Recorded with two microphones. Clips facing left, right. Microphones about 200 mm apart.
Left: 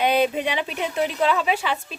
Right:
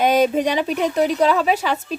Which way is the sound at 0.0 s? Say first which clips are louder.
Right 4 dB; 40° right (ahead or behind).